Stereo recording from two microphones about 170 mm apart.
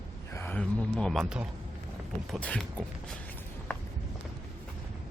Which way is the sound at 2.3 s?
5° left (ahead or behind).